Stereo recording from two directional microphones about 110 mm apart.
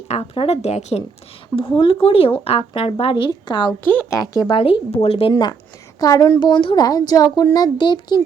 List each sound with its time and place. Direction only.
0.3 s speech: 70° left (ahead or behind); by 1.0 s 85° left
1.5 s speech: 55° left (ahead or behind)
3.8 s speech: 20° left (ahead or behind)
4.2 s speech: 35° left (ahead or behind)
4.5 s speech: 55° left (ahead or behind)
5.3 s speech: 40° left (ahead or behind)
6.4 s speech: 50° left (ahead or behind)